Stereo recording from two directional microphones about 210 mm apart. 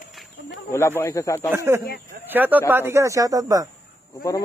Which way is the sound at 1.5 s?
15° right (ahead or behind).